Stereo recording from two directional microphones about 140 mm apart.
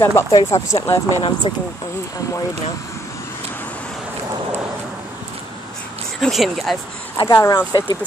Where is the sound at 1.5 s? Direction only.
40° left (ahead or behind).